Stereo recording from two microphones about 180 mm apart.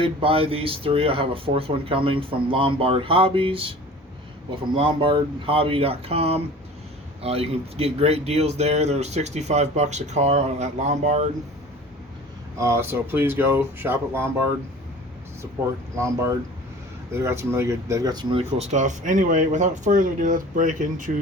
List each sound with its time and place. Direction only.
0.0 s speech: 30° right (ahead or behind)
12.5 s speech: 15° right (ahead or behind)
17.1 s speech: 15° right (ahead or behind); by 21.2 s 45° right (ahead or behind)